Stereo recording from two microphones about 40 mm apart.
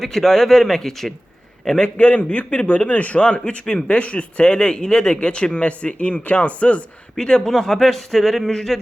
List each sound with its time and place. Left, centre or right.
0.0 s speech: centre
1.8 s a man's voice: left
7.2 s speech: centre